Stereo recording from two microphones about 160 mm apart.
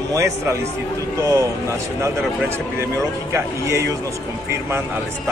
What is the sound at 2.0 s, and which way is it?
Speech, 15° right (ahead or behind).